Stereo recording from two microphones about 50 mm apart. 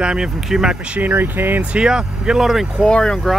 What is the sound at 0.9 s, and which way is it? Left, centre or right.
Speech, right.